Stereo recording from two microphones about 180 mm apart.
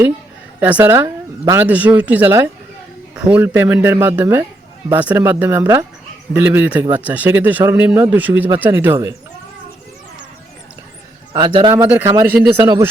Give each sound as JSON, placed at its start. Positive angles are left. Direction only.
{"t": 0.6, "sound": "speech", "side_deg": -10}
{"t": 11.3, "sound": "a man's voice", "side_deg": -25}
{"t": 11.7, "sound": "speech", "side_deg": -10}
{"t": 12.6, "sound": "a man's voice", "side_deg": -25}